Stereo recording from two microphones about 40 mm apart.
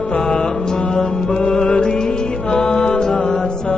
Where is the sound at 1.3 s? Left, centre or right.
Left.